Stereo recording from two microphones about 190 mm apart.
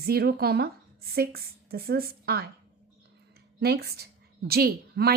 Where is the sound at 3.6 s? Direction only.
55° right (ahead or behind).